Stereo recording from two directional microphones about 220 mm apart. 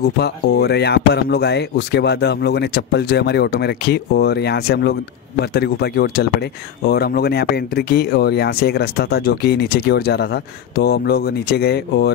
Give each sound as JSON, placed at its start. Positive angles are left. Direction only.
{"t": 0.0, "sound": "speech", "side_deg": 50}